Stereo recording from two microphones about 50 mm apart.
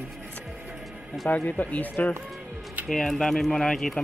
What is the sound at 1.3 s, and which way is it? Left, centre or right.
Speech, left.